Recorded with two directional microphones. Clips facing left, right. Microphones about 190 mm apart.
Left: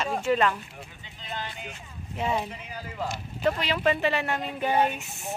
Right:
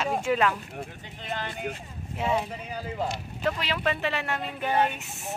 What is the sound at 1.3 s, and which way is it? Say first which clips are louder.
Speech: right 4 dB; 55° right (ahead or behind).